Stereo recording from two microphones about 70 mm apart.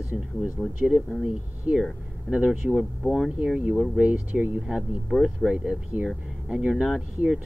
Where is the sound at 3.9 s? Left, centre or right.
Centre.